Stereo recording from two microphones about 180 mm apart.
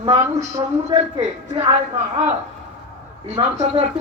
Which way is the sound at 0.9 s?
35° right (ahead or behind).